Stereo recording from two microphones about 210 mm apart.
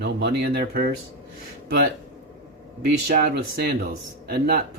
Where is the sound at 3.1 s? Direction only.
45° right (ahead or behind).